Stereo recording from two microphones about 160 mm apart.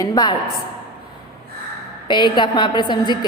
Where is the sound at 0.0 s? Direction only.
25° left (ahead or behind).